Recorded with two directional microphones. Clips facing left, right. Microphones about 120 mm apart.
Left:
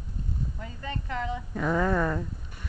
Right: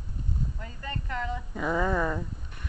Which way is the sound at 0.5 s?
15° left (ahead or behind).